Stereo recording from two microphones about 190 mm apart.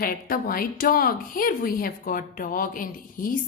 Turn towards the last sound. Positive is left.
turn(degrees=45)  # may be behind; listen again after turning